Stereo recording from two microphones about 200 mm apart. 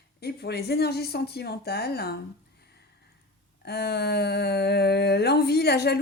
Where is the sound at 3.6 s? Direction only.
55° left (ahead or behind).